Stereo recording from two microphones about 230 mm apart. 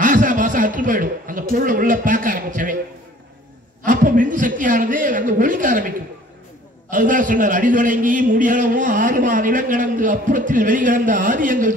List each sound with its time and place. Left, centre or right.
0.0 s a man's voice: right
3.8 s a man's voice: right